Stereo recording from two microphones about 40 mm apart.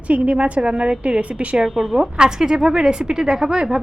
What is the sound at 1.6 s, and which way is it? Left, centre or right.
Speech, centre.